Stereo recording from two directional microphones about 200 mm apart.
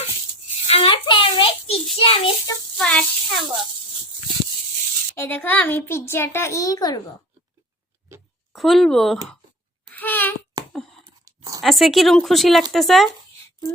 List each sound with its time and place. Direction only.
0.7 s child singing: 25° left (ahead or behind)
2.0 s a child's voice: 30° left (ahead or behind)
2.7 s speech: 5° left (ahead or behind)
5.1 s a child's voice: 10° left (ahead or behind)
8.5 s speech: centre (ahead or behind)
11.3 s a sound: 15° right (ahead or behind)
11.6 s speech: centre (ahead or behind)